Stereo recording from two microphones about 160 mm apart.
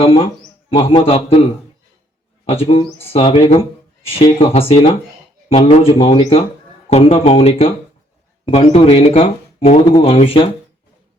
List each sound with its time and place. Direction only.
0.0 s speech: 35° left (ahead or behind)
2.4 s speech: 35° left (ahead or behind)